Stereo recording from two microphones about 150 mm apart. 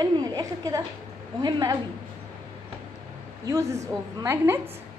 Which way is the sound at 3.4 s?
20° right (ahead or behind).